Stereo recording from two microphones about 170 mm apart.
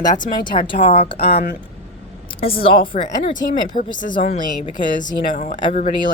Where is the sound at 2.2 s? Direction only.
35° left (ahead or behind).